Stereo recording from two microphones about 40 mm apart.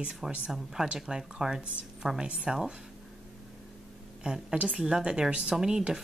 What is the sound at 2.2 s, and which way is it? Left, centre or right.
Speech, right.